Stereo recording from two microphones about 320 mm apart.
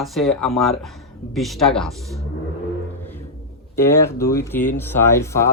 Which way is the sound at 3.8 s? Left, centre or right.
Centre.